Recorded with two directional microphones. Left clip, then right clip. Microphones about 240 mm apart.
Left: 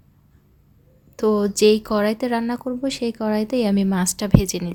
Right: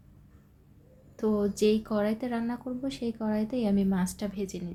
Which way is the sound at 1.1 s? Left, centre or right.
Left.